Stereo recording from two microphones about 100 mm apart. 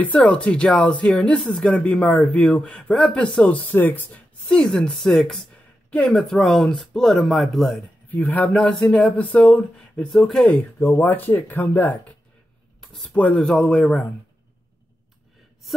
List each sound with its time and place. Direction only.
0.0 s speech: 10° left (ahead or behind)
4.5 s speech: 5° left (ahead or behind)
8.1 s speech: 15° left (ahead or behind)
8.5 s speech: 5° left (ahead or behind)
10.8 s speech: 20° left (ahead or behind)